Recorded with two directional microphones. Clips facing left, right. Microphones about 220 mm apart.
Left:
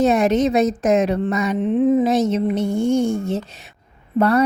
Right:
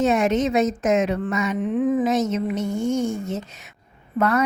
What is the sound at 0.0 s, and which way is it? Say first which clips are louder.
A woman's voice: left 3 dB; 35° left (ahead or behind).